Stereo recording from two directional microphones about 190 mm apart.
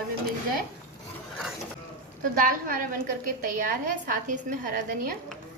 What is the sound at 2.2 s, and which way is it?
A woman's voice, 45° right (ahead or behind).